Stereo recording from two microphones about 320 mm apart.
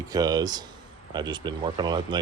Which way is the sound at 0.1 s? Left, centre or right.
Centre.